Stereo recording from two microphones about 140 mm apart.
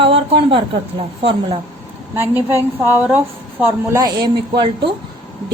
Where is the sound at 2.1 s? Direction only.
15° right (ahead or behind).